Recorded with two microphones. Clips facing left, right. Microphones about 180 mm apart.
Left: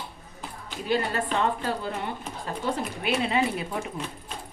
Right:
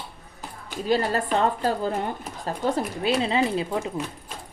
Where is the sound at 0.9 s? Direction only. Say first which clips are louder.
Right 3 dB; 40° right (ahead or behind).